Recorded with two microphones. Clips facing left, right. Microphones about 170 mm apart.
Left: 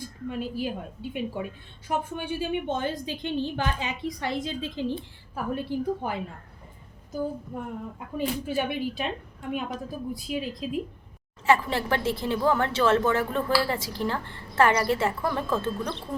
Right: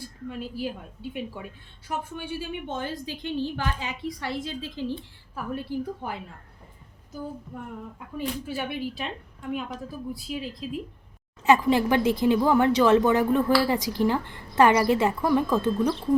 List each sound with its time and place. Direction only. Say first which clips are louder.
0.0 s a woman's voice: left 3 dB; 20° left (ahead or behind)
8.4 s a woman's voice: left 3 dB; 20° left (ahead or behind)
11.4 s speech: right 4 dB; 15° right (ahead or behind)